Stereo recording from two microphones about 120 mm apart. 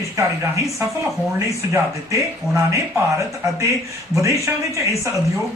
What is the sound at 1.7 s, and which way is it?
Speech, 25° right (ahead or behind).